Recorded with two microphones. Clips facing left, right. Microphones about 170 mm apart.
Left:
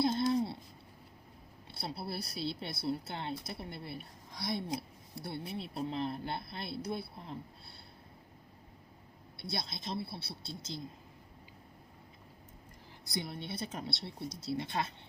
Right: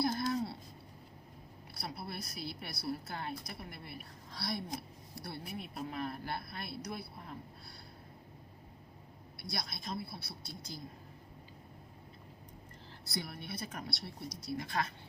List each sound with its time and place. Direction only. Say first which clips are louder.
0.0 s a sound: left 4 dB; 25° left (ahead or behind)
1.7 s speech: left 3 dB; 30° left (ahead or behind)
9.4 s speech: left 2 dB; 25° left (ahead or behind)
13.1 s speech: left 3 dB; 20° left (ahead or behind)